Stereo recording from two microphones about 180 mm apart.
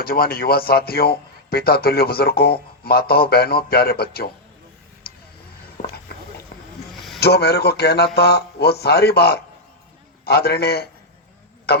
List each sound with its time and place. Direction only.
0.0 s a man's voice: 55° left (ahead or behind)
5.0 s vehicle: 60° left (ahead or behind)
5.8 s a sound: 50° left (ahead or behind)
7.2 s a man's voice: 65° left (ahead or behind)